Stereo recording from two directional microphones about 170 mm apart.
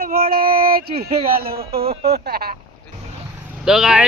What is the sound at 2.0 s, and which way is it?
Speech, 70° right (ahead or behind).